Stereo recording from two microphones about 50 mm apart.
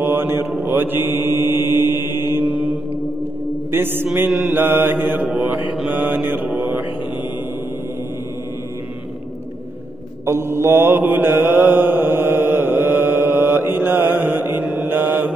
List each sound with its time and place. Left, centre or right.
0.0 s mantra: right
2.4 s mantra: right
3.7 s mantra: right
10.2 s mantra: right